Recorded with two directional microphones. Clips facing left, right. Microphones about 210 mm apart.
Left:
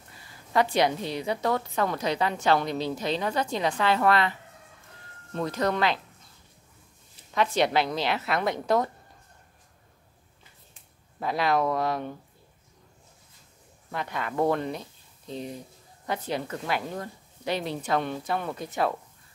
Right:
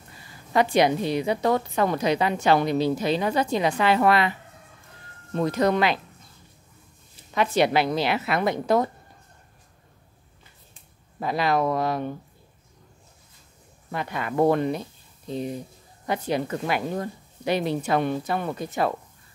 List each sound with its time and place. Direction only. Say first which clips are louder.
0.5 s a woman's voice: right 4 dB; 15° right (ahead or behind)
7.3 s a woman's voice: right 3 dB; 5° right (ahead or behind)
11.1 s a woman's voice: right 2 dB; centre (ahead or behind)
13.9 s a woman's voice: right 4 dB; 5° right (ahead or behind)